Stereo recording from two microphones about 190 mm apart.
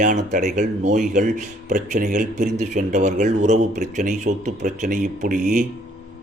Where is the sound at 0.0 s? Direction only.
40° right (ahead or behind).